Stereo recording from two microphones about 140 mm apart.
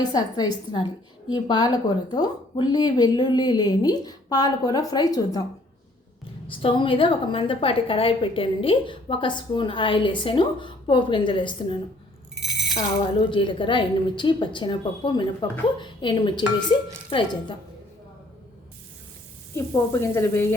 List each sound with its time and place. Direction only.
0.0 s a woman's voice: 30° left (ahead or behind)
6.5 s a woman's voice: 40° left (ahead or behind)
12.4 s a sound: centre (ahead or behind)
12.7 s a woman's voice: 35° left (ahead or behind)
19.5 s speech: 20° left (ahead or behind)